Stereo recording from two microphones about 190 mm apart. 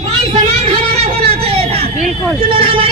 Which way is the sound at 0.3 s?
35° right (ahead or behind).